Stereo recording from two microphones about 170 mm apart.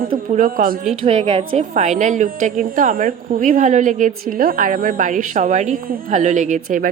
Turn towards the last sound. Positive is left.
turn(degrees=-50)  # may be behind; listen again after turning